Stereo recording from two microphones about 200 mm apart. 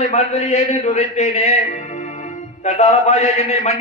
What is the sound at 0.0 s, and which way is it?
A man's voice, 35° left (ahead or behind).